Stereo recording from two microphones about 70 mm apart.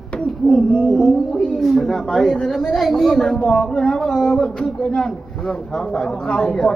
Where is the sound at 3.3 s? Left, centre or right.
Centre.